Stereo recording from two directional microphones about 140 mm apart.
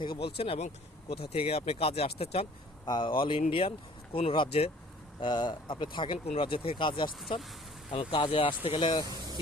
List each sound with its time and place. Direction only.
0.0 s speech: 40° left (ahead or behind)
5.2 s speech: 30° left (ahead or behind)